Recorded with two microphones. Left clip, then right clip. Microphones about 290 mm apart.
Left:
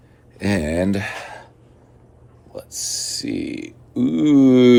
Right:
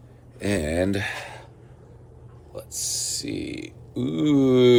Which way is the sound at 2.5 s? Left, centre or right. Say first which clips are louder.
Left 3 dB; centre.